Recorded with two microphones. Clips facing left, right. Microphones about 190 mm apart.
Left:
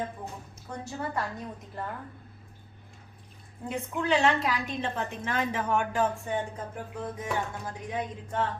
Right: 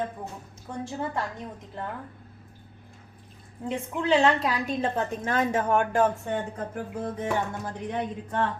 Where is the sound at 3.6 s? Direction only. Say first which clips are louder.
Right 3 dB; 25° right (ahead or behind).